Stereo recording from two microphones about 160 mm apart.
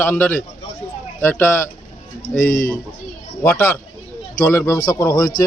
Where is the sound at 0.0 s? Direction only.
15° left (ahead or behind).